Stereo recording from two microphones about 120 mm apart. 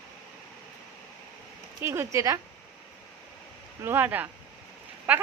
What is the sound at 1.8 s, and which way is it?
Speech, 20° right (ahead or behind).